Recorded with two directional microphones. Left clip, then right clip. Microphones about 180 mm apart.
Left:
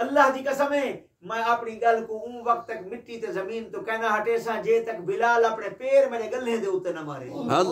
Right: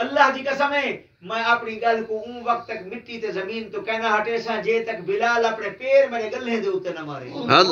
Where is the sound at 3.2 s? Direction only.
25° left (ahead or behind).